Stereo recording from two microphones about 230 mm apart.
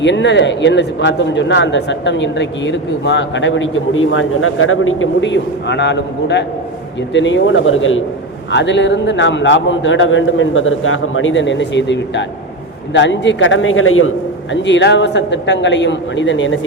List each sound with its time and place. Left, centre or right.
0.0 s a man's voice: left
14.5 s speech: left